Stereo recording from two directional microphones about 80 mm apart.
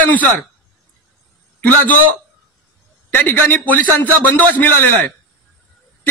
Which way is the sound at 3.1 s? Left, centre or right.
Left.